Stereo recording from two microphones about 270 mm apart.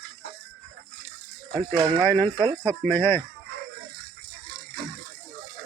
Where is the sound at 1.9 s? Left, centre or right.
Centre.